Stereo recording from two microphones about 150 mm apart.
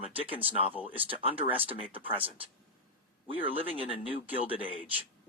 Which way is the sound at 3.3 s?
35° right (ahead or behind).